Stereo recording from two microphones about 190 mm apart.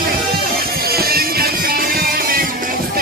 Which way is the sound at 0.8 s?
55° right (ahead or behind).